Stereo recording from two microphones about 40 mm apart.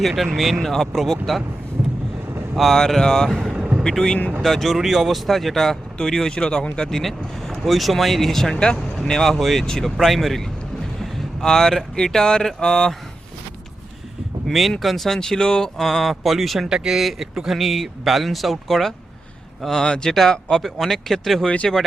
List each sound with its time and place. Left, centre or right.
0.0 s speech: centre
0.6 s speech: centre
2.7 s speech: centre
4.8 s speech: centre
9.2 s speech: centre
11.0 s a sound: centre
11.9 s speech: centre
14.4 s speech: centre
16.6 s speech: centre
17.0 s speech: centre
17.3 s speech: centre
17.6 s speech: centre